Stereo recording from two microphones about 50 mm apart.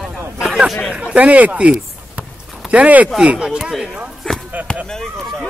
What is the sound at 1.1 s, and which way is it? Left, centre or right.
Speech, right.